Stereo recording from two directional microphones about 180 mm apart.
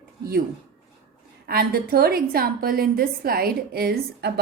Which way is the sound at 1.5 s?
55° right (ahead or behind).